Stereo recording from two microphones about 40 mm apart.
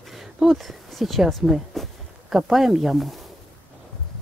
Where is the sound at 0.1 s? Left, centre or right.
Centre.